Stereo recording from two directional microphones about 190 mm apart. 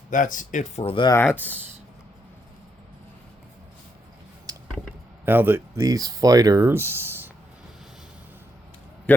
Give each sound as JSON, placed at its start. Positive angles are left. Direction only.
{"t": 0.1, "sound": "speech", "side_deg": 45}
{"t": 1.1, "sound": "speech", "side_deg": 10}
{"t": 4.5, "sound": "a sound", "side_deg": -20}
{"t": 5.2, "sound": "speech", "side_deg": -10}
{"t": 9.1, "sound": "a man's voice", "side_deg": 10}